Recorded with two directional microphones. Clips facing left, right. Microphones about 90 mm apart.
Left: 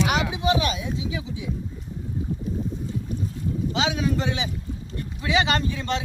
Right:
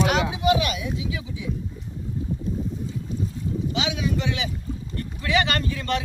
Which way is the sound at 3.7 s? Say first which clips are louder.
Left 3 dB; 35° left (ahead or behind).